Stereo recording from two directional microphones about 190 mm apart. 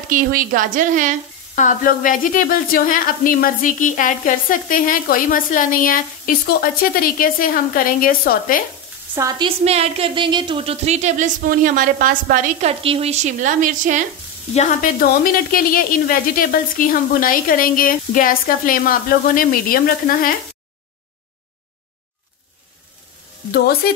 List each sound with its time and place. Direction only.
0.1 s a woman's voice: 45° right (ahead or behind)
1.5 s a woman's voice: 40° left (ahead or behind)
9.4 s speech: 30° right (ahead or behind)
12.6 s speech: 30° right (ahead or behind)
14.5 s a woman's voice: 40° left (ahead or behind)